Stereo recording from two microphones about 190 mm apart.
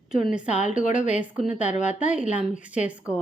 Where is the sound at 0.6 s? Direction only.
40° left (ahead or behind).